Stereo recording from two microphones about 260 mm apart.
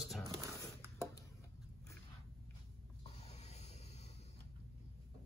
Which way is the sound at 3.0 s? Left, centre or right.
Left.